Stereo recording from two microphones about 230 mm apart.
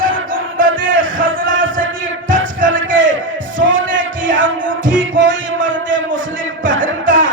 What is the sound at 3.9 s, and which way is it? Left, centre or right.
Music, right.